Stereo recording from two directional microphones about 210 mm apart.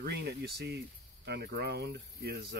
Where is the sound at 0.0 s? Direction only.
50° right (ahead or behind).